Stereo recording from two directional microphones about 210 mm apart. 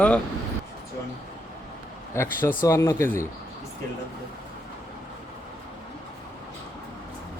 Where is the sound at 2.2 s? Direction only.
10° left (ahead or behind).